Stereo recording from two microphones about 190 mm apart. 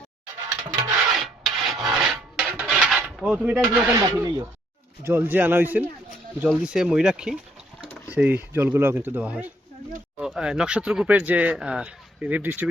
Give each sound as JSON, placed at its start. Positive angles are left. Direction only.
{"t": 0.7, "sound": "filing", "side_deg": -20}
{"t": 1.1, "sound": "rub", "side_deg": 0}
{"t": 5.0, "sound": "speech", "side_deg": -10}